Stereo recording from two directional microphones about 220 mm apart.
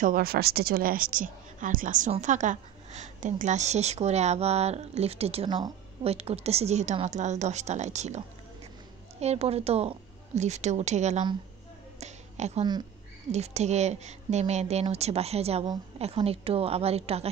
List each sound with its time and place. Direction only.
0.0 s a woman's voice: 40° right (ahead or behind)
9.2 s a woman's voice: 30° right (ahead or behind)
12.0 s finger snapping: 30° right (ahead or behind)
13.3 s speech: 30° right (ahead or behind)